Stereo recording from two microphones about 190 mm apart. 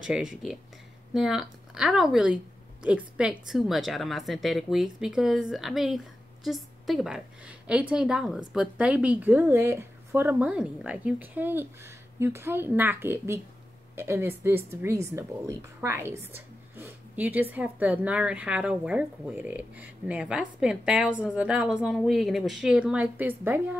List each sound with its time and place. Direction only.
0.0 s a woman's voice: 5° right (ahead or behind)